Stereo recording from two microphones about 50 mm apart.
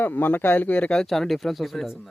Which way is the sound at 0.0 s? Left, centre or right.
Left.